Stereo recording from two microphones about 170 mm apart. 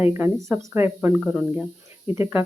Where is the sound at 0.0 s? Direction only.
15° right (ahead or behind).